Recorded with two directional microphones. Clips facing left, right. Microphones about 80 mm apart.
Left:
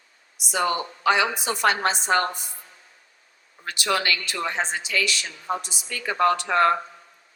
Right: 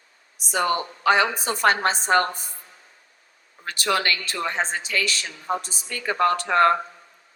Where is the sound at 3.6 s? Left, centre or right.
Right.